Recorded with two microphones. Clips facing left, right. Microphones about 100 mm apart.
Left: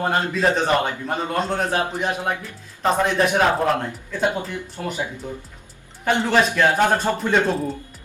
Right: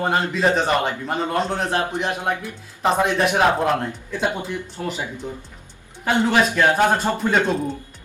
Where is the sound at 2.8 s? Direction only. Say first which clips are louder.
Right 1 dB; 10° right (ahead or behind).